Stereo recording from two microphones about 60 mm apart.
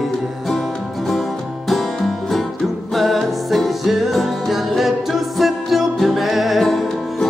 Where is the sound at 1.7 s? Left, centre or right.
Centre.